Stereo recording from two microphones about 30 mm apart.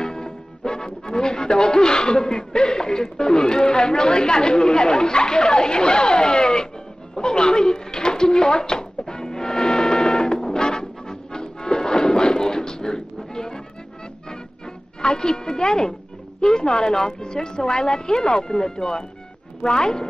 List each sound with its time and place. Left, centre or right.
0.0 s speech: left
7.2 s a sound: left
15.0 s speech: left